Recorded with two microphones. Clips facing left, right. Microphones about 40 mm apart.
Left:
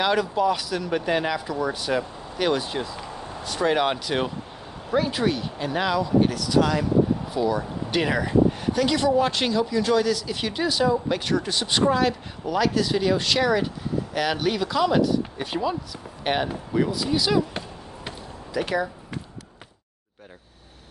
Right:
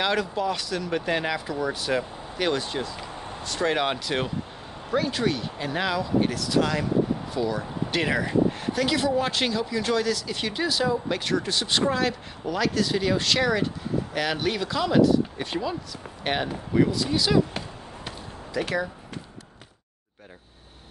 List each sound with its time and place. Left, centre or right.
0.0 s speech: centre
18.5 s speech: centre